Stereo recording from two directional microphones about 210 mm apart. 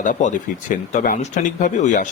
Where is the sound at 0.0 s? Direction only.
35° left (ahead or behind).